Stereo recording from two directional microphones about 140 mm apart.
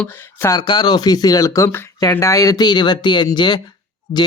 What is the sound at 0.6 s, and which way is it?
A man's voice, 30° left (ahead or behind).